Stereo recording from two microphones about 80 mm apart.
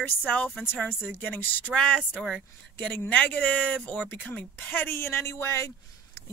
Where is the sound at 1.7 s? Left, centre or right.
Centre; by 5.7 s left.